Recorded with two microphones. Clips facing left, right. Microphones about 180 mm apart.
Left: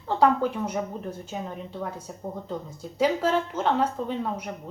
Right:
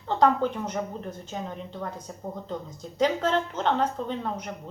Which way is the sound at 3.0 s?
5° left (ahead or behind).